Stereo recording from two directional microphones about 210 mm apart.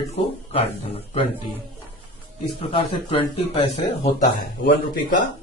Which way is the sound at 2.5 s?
25° left (ahead or behind).